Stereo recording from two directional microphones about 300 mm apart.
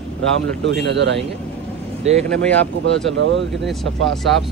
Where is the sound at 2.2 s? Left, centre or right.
Centre.